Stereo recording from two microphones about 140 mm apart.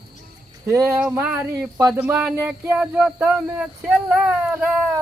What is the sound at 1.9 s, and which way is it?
Speech, 10° right (ahead or behind).